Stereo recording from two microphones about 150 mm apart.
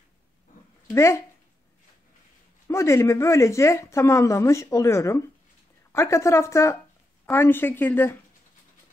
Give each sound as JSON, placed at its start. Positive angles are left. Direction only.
{"t": 0.9, "sound": "speech", "side_deg": 20}
{"t": 2.7, "sound": "speech", "side_deg": 20}